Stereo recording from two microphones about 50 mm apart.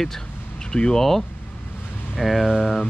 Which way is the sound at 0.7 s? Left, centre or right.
Centre.